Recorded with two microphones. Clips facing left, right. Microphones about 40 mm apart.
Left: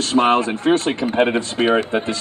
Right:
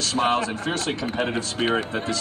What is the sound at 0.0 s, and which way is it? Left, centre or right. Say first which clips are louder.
Speech: left 6 dB; left.